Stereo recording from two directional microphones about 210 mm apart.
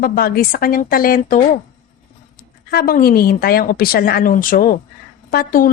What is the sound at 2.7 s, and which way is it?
A woman's voice, 45° left (ahead or behind).